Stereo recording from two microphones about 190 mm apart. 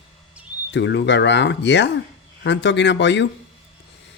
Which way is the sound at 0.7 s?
65° left (ahead or behind).